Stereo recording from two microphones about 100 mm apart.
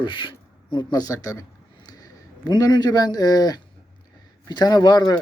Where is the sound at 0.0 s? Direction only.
55° left (ahead or behind).